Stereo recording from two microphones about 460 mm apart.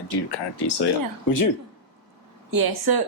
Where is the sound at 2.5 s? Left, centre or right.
Right.